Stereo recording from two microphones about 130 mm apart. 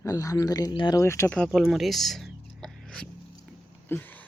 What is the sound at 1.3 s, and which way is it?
Speech, 5° left (ahead or behind).